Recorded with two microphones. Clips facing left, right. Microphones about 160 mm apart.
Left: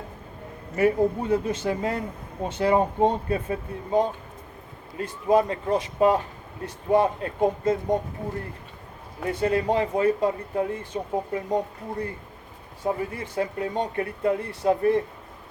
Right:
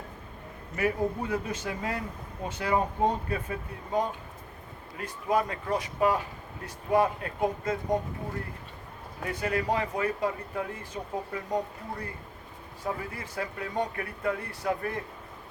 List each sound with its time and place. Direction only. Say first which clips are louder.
0.8 s speech: left 7 dB; 25° left (ahead or behind)
9.2 s speech: left 6 dB; 30° left (ahead or behind)